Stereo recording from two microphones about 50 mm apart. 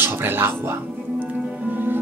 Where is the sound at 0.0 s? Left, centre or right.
Right.